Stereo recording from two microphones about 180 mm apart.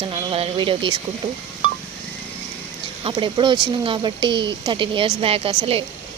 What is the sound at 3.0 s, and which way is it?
Speech, 30° right (ahead or behind).